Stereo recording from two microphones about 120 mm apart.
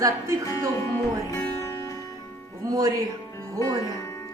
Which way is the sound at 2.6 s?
30° right (ahead or behind).